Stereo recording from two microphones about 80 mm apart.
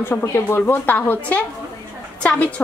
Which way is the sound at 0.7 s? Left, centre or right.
Left.